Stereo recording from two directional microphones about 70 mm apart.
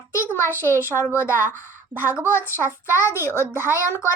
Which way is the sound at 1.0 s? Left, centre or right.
Left.